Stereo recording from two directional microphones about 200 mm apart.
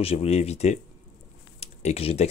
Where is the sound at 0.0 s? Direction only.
30° left (ahead or behind).